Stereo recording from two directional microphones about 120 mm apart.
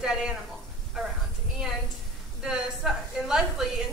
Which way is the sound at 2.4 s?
5° right (ahead or behind).